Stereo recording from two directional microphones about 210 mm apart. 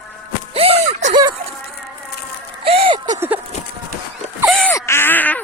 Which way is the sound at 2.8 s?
20° right (ahead or behind).